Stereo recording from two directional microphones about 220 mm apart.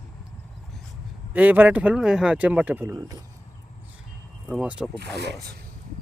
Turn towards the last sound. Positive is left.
turn(degrees=-50)  # may be behind; listen again after turning